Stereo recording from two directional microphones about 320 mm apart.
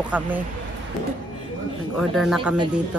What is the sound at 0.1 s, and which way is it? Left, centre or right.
Speech, centre.